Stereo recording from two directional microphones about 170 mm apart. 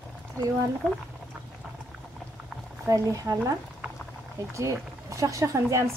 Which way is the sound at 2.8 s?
20° right (ahead or behind).